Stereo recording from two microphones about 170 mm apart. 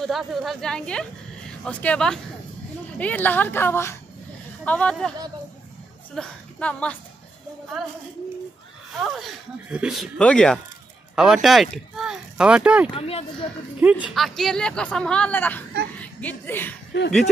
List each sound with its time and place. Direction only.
0.0 s a woman's voice: centre (ahead or behind)
6.1 s a woman's voice: 5° left (ahead or behind)
9.0 s speech: centre (ahead or behind)
12.9 s speech: 35° left (ahead or behind)
13.7 s a child's voice: 10° right (ahead or behind); by 16.7 s 10° left (ahead or behind)
16.9 s speech: 90° left